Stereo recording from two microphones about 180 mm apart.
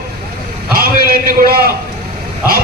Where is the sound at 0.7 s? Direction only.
55° right (ahead or behind).